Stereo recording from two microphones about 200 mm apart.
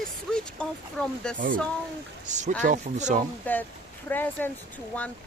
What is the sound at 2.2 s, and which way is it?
Speech, 35° right (ahead or behind).